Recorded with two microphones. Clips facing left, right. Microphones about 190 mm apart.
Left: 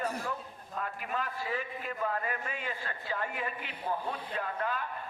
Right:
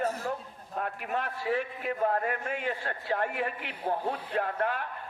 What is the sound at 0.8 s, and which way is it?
A man's voice, 60° right (ahead or behind).